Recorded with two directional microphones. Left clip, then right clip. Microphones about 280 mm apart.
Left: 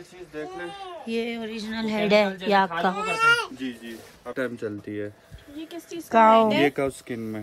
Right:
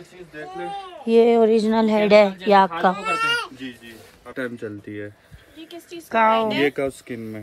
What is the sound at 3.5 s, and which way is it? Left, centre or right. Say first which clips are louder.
Speech: left 2 dB; left.